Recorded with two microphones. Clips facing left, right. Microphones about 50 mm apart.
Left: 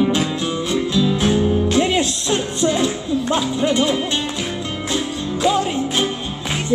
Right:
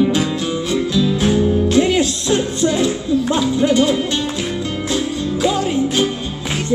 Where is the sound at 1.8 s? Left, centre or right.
Left.